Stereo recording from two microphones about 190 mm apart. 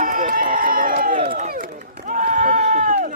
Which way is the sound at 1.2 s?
30° right (ahead or behind).